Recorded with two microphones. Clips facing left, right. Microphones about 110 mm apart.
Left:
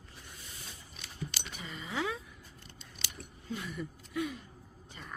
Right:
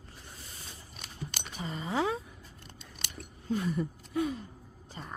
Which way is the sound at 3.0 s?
45° right (ahead or behind).